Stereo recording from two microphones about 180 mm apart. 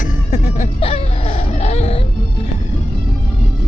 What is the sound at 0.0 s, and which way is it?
Music, 45° left (ahead or behind).